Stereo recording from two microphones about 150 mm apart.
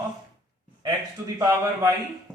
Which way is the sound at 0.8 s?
20° right (ahead or behind).